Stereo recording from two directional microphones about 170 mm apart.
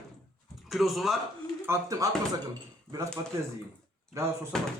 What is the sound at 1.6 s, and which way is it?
Speech, 15° right (ahead or behind).